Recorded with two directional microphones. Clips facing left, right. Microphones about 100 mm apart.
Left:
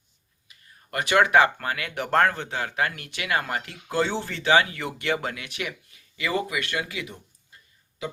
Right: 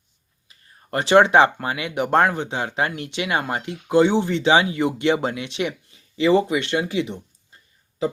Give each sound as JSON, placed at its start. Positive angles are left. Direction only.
{"t": 0.4, "sound": "speech", "side_deg": -30}